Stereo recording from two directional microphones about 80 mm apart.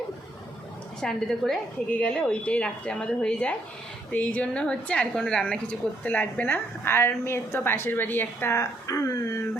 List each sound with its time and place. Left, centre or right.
1.0 s a woman's voice: centre
1.9 s a woman's voice: centre; by 9.4 s left